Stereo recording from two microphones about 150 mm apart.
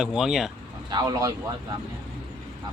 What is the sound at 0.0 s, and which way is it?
Speech, 5° right (ahead or behind).